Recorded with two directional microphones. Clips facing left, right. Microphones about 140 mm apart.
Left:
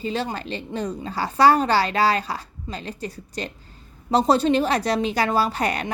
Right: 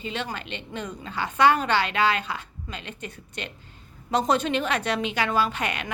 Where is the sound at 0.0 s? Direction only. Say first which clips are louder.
Left 5 dB; 40° left (ahead or behind).